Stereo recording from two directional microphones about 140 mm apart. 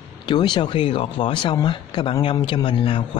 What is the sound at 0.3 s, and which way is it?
A man's voice, 35° left (ahead or behind).